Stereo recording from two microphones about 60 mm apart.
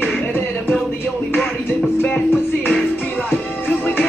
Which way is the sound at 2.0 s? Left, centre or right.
Left.